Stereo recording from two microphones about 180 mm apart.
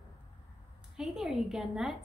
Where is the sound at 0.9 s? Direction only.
5° right (ahead or behind).